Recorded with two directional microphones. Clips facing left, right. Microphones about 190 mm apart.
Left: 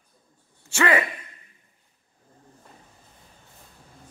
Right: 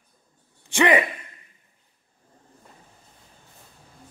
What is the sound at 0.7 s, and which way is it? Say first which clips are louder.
Speech: right 3 dB; 15° right (ahead or behind).